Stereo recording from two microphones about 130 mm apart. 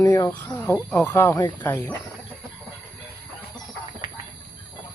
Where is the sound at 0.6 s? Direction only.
15° left (ahead or behind).